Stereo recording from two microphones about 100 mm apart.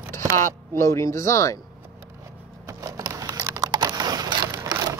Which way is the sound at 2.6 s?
40° right (ahead or behind).